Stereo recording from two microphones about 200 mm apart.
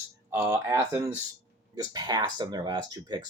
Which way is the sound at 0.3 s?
15° right (ahead or behind).